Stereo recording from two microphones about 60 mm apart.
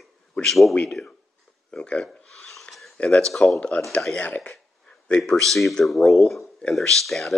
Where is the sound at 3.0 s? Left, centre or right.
Centre.